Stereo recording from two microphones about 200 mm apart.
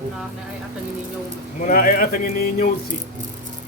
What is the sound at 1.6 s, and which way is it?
Speech, 45° left (ahead or behind).